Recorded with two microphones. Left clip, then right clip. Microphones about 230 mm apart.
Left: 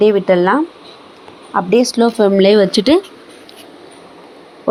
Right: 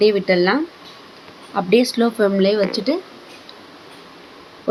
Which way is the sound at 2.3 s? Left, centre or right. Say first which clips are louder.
Left 7 dB; left.